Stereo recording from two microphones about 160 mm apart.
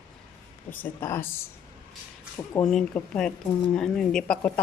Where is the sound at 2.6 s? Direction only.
5° left (ahead or behind).